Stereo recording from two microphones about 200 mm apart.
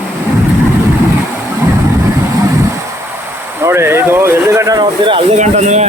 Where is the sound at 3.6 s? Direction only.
10° right (ahead or behind).